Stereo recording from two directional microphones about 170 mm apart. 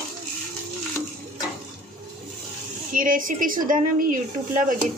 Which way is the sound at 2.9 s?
55° right (ahead or behind).